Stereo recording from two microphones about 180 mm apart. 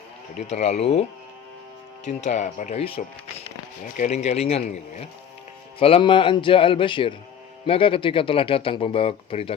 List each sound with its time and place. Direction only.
0.5 s speech: 35° left (ahead or behind)
2.0 s speech: 40° left (ahead or behind)